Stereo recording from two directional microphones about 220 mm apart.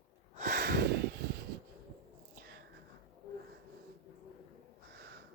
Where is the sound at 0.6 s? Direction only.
50° right (ahead or behind).